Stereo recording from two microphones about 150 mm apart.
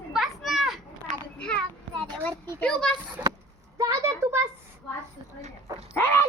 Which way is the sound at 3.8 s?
20° right (ahead or behind).